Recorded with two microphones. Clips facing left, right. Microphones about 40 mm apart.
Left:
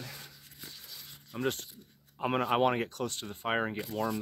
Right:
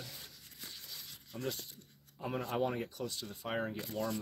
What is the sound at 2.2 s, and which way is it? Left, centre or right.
Speech, left.